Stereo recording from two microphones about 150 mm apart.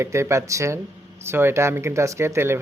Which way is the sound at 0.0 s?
20° right (ahead or behind).